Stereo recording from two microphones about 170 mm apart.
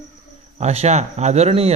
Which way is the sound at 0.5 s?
40° right (ahead or behind).